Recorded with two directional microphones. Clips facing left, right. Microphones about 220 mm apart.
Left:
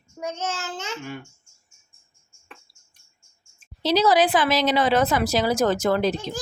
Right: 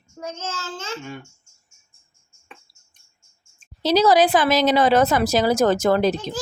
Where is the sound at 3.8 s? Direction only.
45° right (ahead or behind).